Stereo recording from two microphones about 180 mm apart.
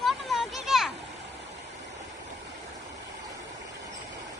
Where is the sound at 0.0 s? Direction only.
Centre (ahead or behind).